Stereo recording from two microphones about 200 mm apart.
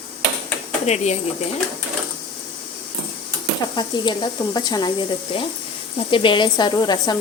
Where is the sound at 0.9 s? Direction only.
35° left (ahead or behind).